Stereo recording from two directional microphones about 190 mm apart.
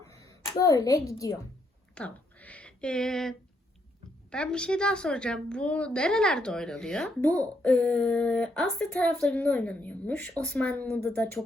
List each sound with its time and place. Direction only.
0.0 s speech: 15° left (ahead or behind)
2.0 s a sound: 5° left (ahead or behind)
4.3 s a woman's voice: 5° left (ahead or behind)